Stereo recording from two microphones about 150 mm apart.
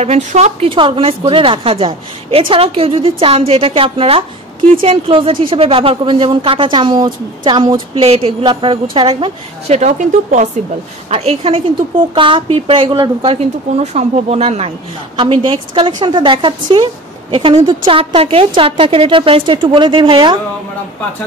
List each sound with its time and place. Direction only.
0.0 s a woman's voice: 45° right (ahead or behind)
11.1 s a woman's voice: 45° right (ahead or behind)